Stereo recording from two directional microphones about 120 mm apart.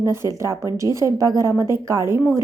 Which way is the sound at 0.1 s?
25° right (ahead or behind).